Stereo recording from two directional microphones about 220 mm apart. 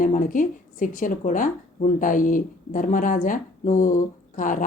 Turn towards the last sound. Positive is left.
turn(degrees=35)  # may be behind; listen again after turning